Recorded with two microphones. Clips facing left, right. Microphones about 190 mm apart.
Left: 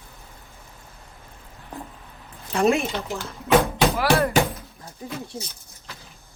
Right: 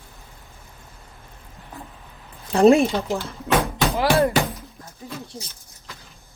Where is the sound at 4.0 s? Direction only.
20° right (ahead or behind).